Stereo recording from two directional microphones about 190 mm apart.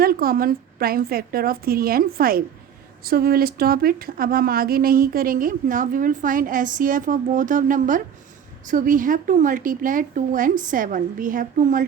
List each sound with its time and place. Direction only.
0.0 s speech: 50° right (ahead or behind)